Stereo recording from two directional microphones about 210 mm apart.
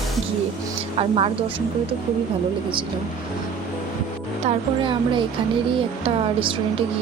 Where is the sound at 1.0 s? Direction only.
25° right (ahead or behind).